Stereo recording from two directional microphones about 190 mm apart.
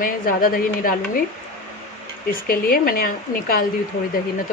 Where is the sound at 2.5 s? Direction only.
50° left (ahead or behind).